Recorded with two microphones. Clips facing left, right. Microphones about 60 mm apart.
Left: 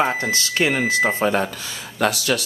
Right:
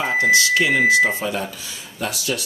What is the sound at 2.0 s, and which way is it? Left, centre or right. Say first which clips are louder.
Speech: left 5 dB; left.